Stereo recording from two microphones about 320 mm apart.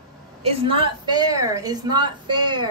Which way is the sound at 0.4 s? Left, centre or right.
Centre.